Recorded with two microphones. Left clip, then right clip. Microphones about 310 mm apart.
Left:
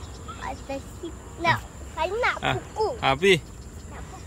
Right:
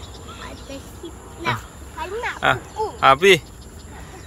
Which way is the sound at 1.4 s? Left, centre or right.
Centre.